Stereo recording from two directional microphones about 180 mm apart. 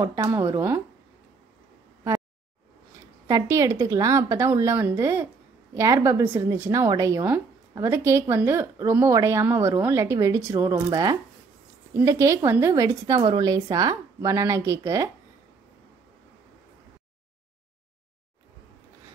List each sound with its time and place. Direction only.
0.0 s a woman's voice: 15° right (ahead or behind)
3.3 s a woman's voice: 20° right (ahead or behind)